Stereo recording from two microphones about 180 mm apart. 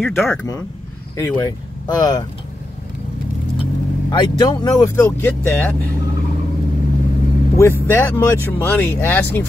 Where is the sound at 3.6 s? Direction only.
25° left (ahead or behind).